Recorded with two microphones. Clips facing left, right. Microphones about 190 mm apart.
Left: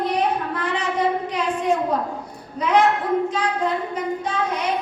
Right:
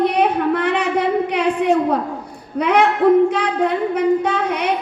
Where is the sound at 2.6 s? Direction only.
65° right (ahead or behind).